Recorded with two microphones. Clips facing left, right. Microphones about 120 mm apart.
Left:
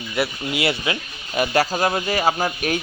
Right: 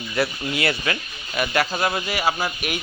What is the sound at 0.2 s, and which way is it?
Speech, 25° left (ahead or behind).